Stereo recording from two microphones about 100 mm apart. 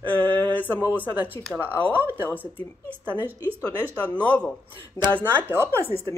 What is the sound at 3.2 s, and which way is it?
Speech, 20° right (ahead or behind).